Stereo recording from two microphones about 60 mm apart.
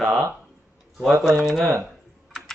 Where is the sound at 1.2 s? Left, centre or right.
Centre.